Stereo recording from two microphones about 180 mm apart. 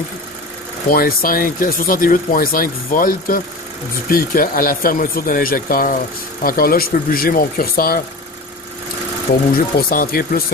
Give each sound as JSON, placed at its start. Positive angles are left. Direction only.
{"t": 0.8, "sound": "speech", "side_deg": 55}
{"t": 9.8, "sound": "speech", "side_deg": 55}